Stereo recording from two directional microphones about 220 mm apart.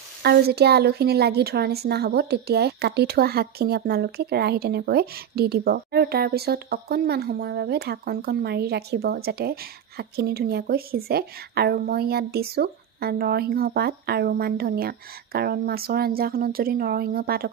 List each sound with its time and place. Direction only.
0.2 s a woman's voice: 45° right (ahead or behind)